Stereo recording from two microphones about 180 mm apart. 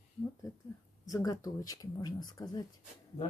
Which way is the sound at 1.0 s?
20° left (ahead or behind).